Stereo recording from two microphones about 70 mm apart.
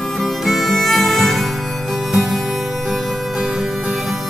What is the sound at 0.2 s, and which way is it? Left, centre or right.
Music, centre.